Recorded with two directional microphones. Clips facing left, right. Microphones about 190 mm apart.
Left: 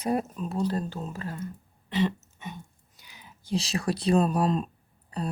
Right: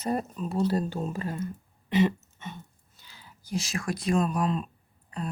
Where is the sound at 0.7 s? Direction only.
10° right (ahead or behind).